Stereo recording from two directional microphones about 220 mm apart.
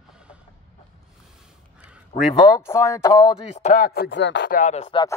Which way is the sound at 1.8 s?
5° right (ahead or behind).